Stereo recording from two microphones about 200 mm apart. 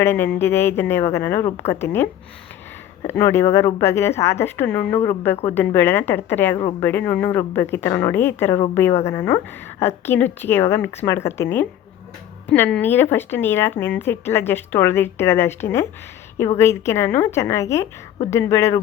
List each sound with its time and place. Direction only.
0.0 s speech: 10° left (ahead or behind)
6.6 s a woman's voice: 30° left (ahead or behind)
6.8 s speech: 10° left (ahead or behind)